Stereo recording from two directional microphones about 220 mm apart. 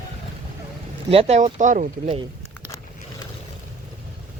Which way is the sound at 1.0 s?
25° right (ahead or behind).